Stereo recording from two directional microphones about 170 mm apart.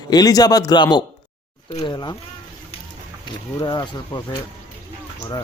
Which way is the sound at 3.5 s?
25° left (ahead or behind).